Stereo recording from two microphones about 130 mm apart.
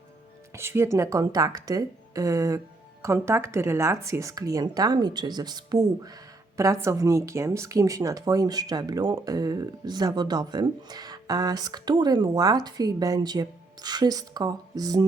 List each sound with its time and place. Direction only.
0.5 s speech: 20° right (ahead or behind)